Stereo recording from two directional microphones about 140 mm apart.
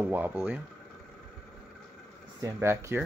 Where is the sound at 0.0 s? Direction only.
10° right (ahead or behind).